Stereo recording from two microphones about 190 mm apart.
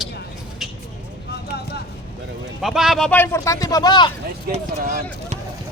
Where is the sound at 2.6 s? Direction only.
Centre (ahead or behind); by 4.1 s 20° left (ahead or behind).